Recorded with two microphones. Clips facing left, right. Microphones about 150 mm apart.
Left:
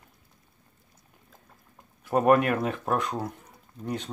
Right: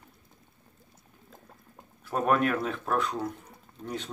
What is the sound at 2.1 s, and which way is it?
Speech, 20° left (ahead or behind).